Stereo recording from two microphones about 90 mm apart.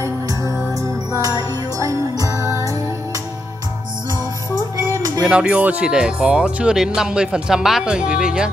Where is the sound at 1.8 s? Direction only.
40° right (ahead or behind).